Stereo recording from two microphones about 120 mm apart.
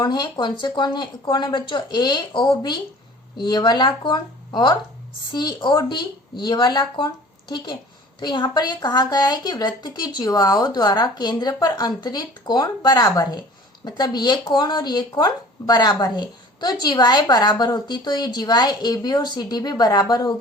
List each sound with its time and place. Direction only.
0.0 s speech: 40° left (ahead or behind)